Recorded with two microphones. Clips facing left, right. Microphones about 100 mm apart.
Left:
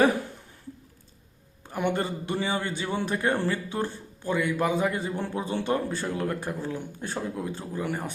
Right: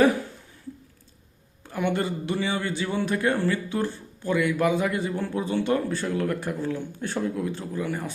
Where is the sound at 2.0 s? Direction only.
25° left (ahead or behind).